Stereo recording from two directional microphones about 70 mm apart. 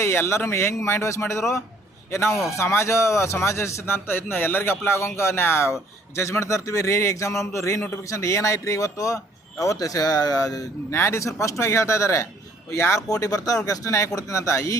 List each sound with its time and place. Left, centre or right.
0.0 s a man's voice: left
10.9 s a man's voice: left